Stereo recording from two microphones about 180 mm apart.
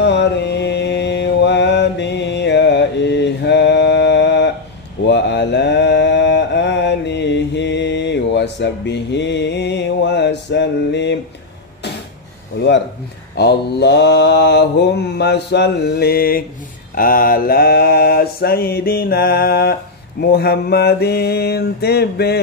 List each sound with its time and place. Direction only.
0.0 s mantra: 75° left (ahead or behind)
13.4 s mantra: 70° left (ahead or behind)